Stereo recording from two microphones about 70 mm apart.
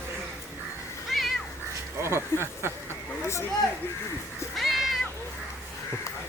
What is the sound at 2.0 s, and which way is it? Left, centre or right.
Speech, right.